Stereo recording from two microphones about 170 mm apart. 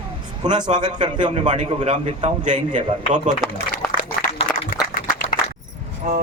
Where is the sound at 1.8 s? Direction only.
40° right (ahead or behind).